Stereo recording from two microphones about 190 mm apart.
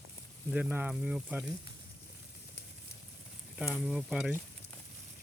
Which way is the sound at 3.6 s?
5° right (ahead or behind).